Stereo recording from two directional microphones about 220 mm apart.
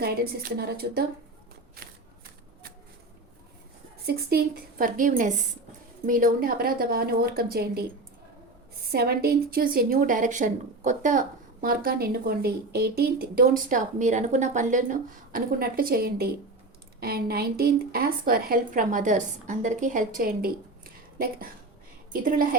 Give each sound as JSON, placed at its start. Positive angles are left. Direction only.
{"t": 0.0, "sound": "speech", "side_deg": -45}
{"t": 4.0, "sound": "a woman's voice", "side_deg": -45}
{"t": 8.9, "sound": "a woman's voice", "side_deg": -45}